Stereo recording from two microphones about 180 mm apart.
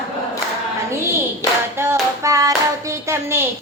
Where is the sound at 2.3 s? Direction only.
20° right (ahead or behind).